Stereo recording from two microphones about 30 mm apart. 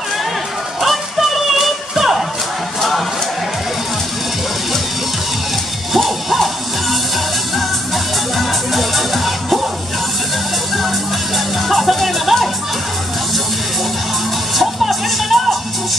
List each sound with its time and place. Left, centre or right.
0.7 s music: centre
5.9 s music: centre
8.4 s music: centre
11.3 s music: centre
14.6 s music: centre